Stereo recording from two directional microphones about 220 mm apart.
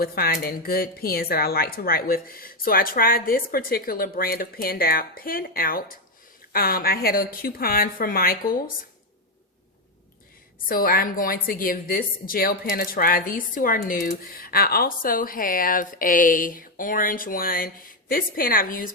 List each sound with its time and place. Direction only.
0.0 s speech: 40° left (ahead or behind)
10.7 s speech: 40° left (ahead or behind)